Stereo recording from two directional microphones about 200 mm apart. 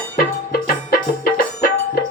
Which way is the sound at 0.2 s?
50° left (ahead or behind).